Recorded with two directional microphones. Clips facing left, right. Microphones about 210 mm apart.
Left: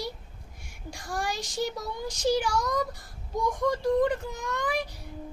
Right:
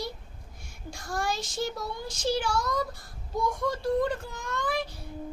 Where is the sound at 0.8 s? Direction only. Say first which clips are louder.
Right 1 dB; 15° left (ahead or behind).